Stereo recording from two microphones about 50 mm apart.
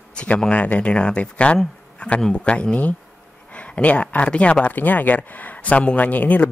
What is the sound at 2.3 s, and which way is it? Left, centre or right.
Speech, left.